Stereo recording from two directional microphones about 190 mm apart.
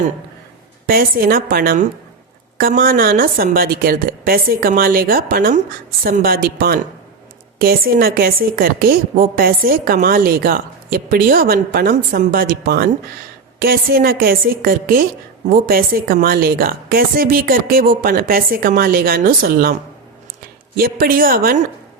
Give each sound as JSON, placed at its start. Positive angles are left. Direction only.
{"t": 0.9, "sound": "a woman's voice", "side_deg": -50}
{"t": 20.7, "sound": "a woman's voice", "side_deg": -50}